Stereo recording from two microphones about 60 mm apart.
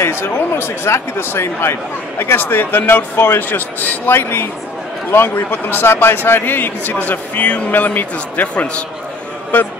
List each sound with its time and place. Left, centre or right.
0.0 s speech: left